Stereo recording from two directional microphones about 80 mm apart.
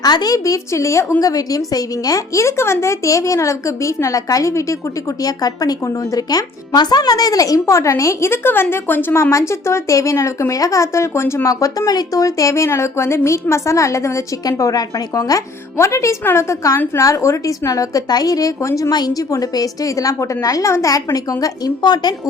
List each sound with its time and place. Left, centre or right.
0.0 s a woman's voice: left
14.6 s a woman's voice: left
18.9 s a woman's voice: left